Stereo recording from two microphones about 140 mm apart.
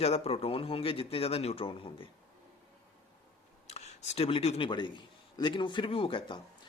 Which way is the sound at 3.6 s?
50° left (ahead or behind).